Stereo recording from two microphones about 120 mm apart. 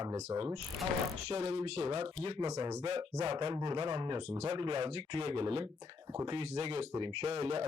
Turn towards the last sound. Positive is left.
turn(degrees=-55)  # may be behind; listen again after turning